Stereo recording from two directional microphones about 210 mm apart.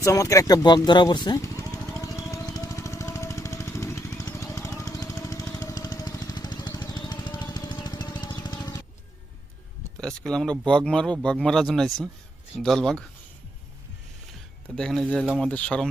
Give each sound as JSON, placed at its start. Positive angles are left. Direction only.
{"t": 0.0, "sound": "a sound", "side_deg": 15}
{"t": 10.2, "sound": "speech", "side_deg": 5}
{"t": 14.8, "sound": "speech", "side_deg": 0}